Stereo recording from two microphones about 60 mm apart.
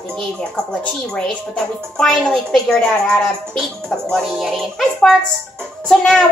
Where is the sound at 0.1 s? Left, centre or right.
Centre.